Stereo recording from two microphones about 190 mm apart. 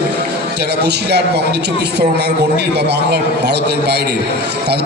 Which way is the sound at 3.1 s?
60° right (ahead or behind).